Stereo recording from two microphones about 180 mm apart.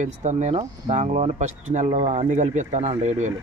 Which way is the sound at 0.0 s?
40° right (ahead or behind).